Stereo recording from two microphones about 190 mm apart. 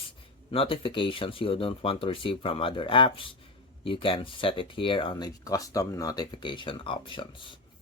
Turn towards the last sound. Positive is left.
turn(degrees=25)  # may be behind; listen again after turning